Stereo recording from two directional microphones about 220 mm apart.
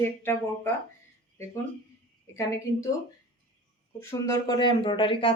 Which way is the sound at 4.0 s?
10° left (ahead or behind).